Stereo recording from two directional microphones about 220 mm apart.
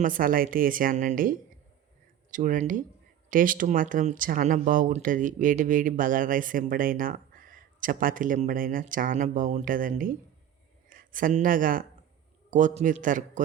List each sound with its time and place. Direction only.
0.0 s speech: 40° right (ahead or behind)